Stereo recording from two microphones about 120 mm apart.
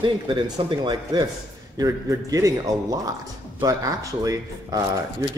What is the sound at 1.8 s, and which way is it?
A man's voice, 30° right (ahead or behind).